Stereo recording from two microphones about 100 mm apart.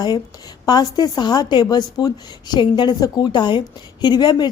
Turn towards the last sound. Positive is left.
turn(degrees=45)  # may be behind; listen again after turning